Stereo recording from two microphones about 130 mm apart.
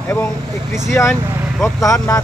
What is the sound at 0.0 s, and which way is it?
A man's voice, 10° left (ahead or behind).